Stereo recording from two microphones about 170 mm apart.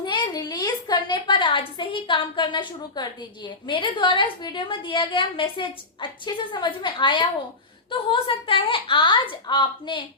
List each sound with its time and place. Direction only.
0.0 s a woman's voice: 25° left (ahead or behind)